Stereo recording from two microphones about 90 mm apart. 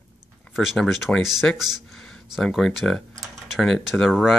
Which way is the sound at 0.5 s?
5° right (ahead or behind).